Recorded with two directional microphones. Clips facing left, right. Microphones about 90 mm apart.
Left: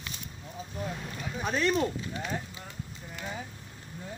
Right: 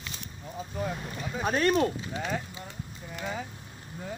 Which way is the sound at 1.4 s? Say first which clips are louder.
Right 3 dB; 50° right (ahead or behind).